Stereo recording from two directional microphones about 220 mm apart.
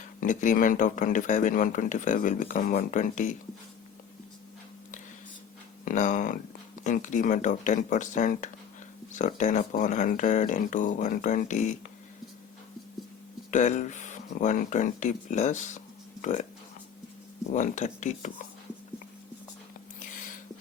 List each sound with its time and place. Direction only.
0.2 s speech: 35° left (ahead or behind)
5.8 s speech: 35° left (ahead or behind)
13.5 s speech: 35° left (ahead or behind)
17.5 s speech: 35° left (ahead or behind)